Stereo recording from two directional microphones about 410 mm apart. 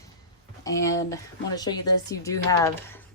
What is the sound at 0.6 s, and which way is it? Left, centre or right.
Speech, centre.